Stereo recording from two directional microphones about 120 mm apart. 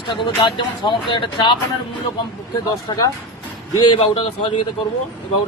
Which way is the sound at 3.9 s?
50° left (ahead or behind).